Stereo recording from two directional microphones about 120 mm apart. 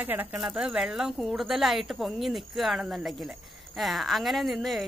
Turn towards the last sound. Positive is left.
turn(degrees=0)  # may be behind; listen again after turning